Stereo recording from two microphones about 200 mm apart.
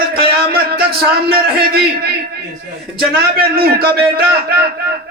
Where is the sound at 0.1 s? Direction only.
50° right (ahead or behind).